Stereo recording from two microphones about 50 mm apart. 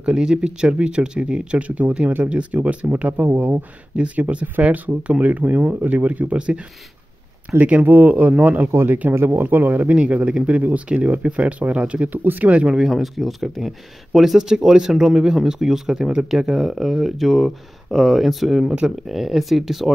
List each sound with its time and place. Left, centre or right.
0.0 s speech: centre; by 3.6 s right
3.9 s speech: right
7.8 s speech: right
9.1 s speech: right
12.2 s speech: right
12.6 s speech: centre
12.9 s speech: centre